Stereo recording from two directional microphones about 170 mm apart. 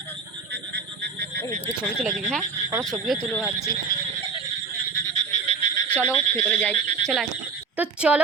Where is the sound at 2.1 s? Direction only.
Centre (ahead or behind).